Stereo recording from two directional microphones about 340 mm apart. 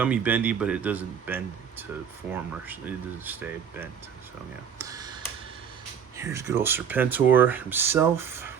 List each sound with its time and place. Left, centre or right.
0.0 s speech: centre
4.8 s a sound: centre
6.1 s speech: centre